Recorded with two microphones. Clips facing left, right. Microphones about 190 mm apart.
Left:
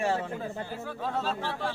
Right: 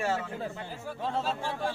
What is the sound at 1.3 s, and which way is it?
Speech, 10° right (ahead or behind).